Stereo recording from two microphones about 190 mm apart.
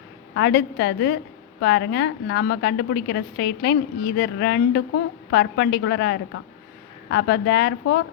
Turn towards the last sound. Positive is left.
turn(degrees=65)  # may be behind; listen again after turning